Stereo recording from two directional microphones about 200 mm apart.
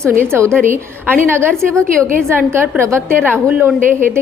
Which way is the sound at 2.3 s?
10° right (ahead or behind).